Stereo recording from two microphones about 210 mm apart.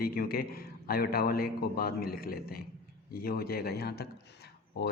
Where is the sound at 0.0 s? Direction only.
45° left (ahead or behind).